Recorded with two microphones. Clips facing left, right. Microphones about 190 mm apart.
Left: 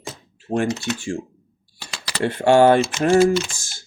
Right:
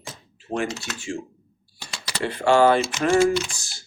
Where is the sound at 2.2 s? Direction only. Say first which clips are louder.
Left 4 dB; 50° left (ahead or behind).